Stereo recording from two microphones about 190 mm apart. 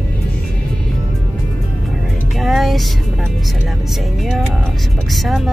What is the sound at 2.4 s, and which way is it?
Music, centre (ahead or behind).